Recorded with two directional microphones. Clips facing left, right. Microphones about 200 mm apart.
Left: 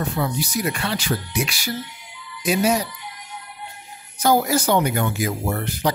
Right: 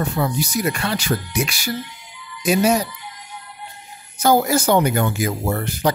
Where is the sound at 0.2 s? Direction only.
45° right (ahead or behind).